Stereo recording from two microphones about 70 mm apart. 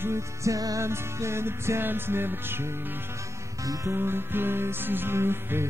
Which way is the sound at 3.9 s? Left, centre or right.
Right.